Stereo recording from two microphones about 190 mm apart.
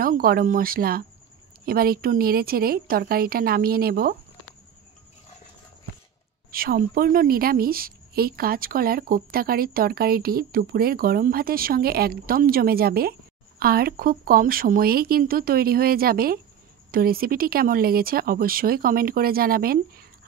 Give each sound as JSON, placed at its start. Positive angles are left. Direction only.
{"t": 0.0, "sound": "a woman's voice", "side_deg": -50}
{"t": 6.5, "sound": "a woman's voice", "side_deg": -50}